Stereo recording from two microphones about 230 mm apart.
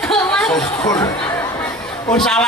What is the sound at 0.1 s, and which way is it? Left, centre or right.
Chatter, centre.